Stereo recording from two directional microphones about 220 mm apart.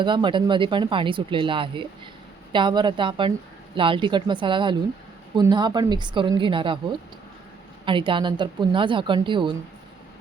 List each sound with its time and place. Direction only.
0.0 s speech: 20° right (ahead or behind)
7.9 s speech: 20° right (ahead or behind)